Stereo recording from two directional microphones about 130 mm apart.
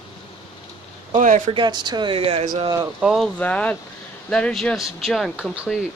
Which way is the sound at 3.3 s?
10° left (ahead or behind).